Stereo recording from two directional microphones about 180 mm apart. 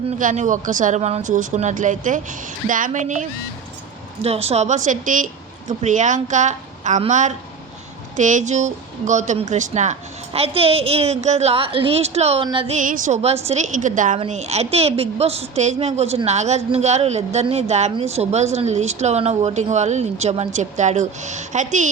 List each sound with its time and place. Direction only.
0.2 s a woman's voice: 45° right (ahead or behind); by 12.7 s 30° right (ahead or behind)
12.7 s a woman's voice: 45° right (ahead or behind)